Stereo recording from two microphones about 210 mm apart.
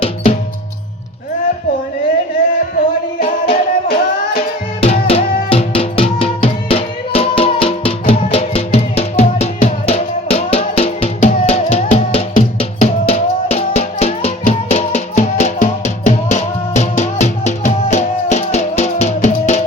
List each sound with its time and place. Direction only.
2.7 s music: 45° left (ahead or behind)
4.8 s music: 25° left (ahead or behind)